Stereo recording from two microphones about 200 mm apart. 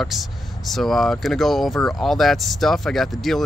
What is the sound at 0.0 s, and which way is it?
Speech, centre (ahead or behind).